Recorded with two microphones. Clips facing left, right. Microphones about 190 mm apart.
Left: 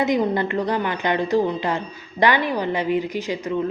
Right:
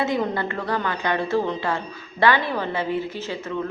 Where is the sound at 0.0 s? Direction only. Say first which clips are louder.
Left 3 dB; 15° left (ahead or behind).